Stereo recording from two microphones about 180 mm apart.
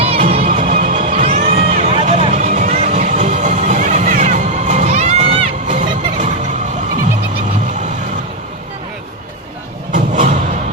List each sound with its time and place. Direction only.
0.0 s music: 35° right (ahead or behind)
9.9 s music: 45° right (ahead or behind)